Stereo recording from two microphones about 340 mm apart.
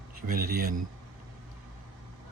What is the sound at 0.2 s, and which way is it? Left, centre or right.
Speech, right.